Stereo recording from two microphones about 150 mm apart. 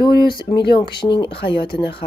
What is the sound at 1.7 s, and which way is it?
Speech, 90° left.